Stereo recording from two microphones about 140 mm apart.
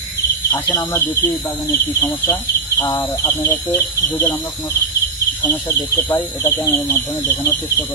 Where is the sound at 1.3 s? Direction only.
Centre (ahead or behind).